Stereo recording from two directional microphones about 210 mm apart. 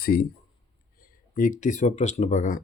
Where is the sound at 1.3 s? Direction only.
40° left (ahead or behind).